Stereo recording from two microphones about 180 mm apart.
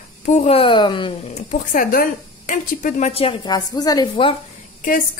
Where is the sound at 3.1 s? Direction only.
30° left (ahead or behind).